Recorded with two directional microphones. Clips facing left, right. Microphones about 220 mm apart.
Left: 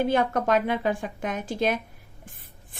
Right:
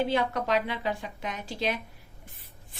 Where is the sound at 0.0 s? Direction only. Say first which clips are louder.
Left 4 dB; 50° left (ahead or behind).